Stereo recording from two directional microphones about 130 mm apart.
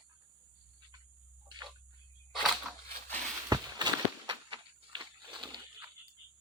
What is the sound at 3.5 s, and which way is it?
Walk, 35° right (ahead or behind).